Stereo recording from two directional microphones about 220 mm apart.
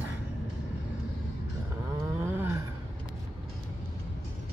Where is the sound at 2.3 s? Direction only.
10° right (ahead or behind).